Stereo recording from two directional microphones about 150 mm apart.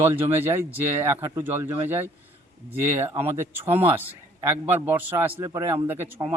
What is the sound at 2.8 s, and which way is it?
Speech, 15° right (ahead or behind).